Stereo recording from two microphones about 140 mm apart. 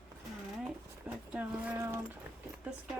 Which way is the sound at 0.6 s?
10° right (ahead or behind).